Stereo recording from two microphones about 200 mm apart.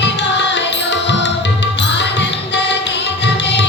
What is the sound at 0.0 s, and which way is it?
Music, 60° left (ahead or behind).